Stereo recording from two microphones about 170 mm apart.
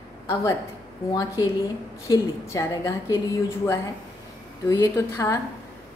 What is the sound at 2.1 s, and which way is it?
A woman's voice, 20° left (ahead or behind).